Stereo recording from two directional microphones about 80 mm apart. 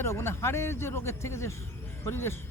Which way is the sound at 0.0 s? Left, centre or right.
Left.